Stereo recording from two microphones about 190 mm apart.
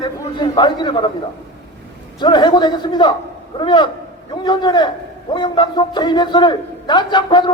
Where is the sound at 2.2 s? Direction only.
25° left (ahead or behind).